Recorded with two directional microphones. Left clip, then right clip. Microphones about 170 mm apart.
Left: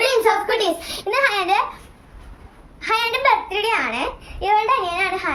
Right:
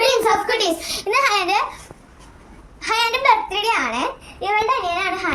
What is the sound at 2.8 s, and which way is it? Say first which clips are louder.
A child's voice: right 1 dB; 15° left (ahead or behind).